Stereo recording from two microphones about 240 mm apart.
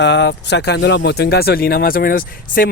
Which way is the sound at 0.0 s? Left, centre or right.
Left.